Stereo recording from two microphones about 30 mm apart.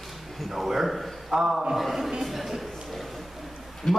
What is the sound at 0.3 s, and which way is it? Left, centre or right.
A man's voice, centre.